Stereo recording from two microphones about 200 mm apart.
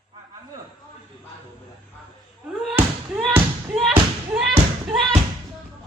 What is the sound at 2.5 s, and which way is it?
Basketball bounce, 5° right (ahead or behind).